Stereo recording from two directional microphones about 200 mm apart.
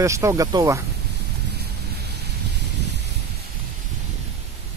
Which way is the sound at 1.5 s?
55° right (ahead or behind).